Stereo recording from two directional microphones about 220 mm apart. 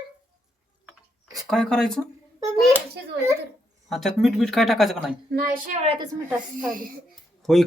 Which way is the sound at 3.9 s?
Centre (ahead or behind).